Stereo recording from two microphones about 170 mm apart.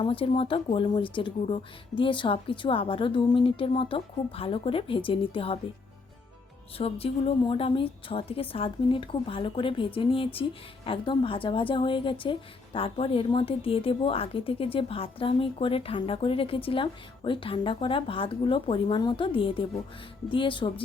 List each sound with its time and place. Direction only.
0.0 s a woman's voice: 35° left (ahead or behind)
6.7 s a woman's voice: 35° left (ahead or behind)